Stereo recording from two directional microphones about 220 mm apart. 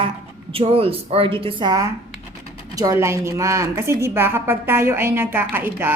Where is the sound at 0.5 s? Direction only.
25° right (ahead or behind).